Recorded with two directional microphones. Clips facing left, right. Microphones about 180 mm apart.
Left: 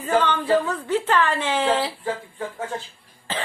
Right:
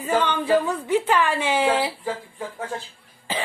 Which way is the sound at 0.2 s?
15° right (ahead or behind).